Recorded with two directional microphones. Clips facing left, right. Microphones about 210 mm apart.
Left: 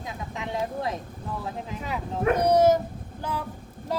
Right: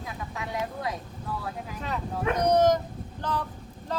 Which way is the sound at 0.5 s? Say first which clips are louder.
Left 3 dB; 30° left (ahead or behind).